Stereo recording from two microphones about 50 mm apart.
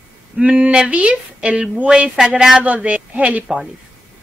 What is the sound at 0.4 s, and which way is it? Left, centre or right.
Speech, right.